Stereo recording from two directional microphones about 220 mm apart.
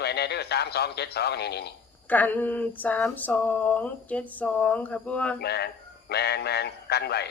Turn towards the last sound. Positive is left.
turn(degrees=50)  # may be behind; listen again after turning